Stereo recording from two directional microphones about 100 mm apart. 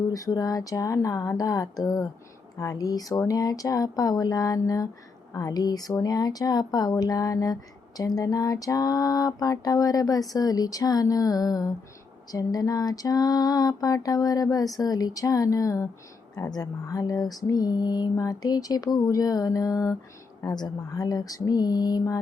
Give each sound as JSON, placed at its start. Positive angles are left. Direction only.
{"t": 0.1, "sound": "speech", "side_deg": 35}